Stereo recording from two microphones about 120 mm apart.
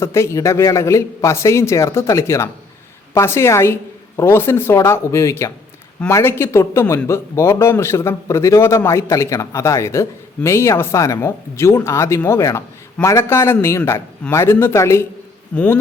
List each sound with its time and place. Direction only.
0.0 s a man's voice: 20° left (ahead or behind)
15.5 s speech: 10° left (ahead or behind)